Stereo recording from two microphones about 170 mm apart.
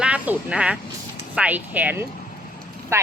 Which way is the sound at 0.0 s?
5° right (ahead or behind).